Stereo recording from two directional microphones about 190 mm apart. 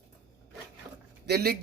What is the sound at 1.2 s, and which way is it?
Speech, 55° right (ahead or behind).